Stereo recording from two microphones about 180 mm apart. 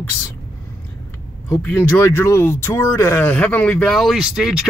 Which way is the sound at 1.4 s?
10° left (ahead or behind).